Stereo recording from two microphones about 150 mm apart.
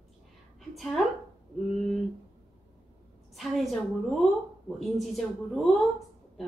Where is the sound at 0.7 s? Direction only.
Centre (ahead or behind).